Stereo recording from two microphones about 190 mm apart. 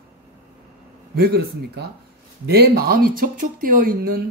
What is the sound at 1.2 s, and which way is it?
Speech, 55° right (ahead or behind).